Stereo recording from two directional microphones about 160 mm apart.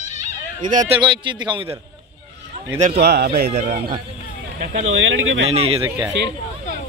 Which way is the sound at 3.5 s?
50° right (ahead or behind).